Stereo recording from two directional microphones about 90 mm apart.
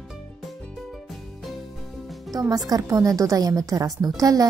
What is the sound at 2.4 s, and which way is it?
A woman's voice, 45° right (ahead or behind).